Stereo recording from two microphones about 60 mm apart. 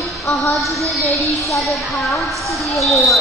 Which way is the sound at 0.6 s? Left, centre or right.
Centre.